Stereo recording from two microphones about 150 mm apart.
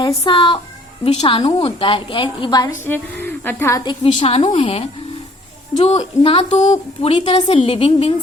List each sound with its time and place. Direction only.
0.3 s a woman's voice: 35° left (ahead or behind)
2.8 s a woman's voice: 15° left (ahead or behind)
4.0 s a woman's voice: 40° left (ahead or behind)